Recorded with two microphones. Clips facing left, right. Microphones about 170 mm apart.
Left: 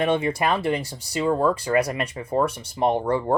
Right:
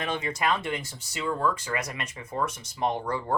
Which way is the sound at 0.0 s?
30° left (ahead or behind).